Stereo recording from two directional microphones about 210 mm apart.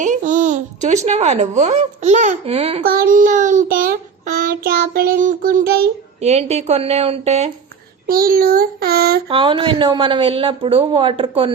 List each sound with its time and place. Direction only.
0.0 s a child's voice: 35° right (ahead or behind)
2.8 s child singing: 45° right (ahead or behind)
6.1 s child singing: 30° right (ahead or behind)
8.0 s a child's voice: 45° right (ahead or behind)
9.3 s a woman's voice: 25° right (ahead or behind)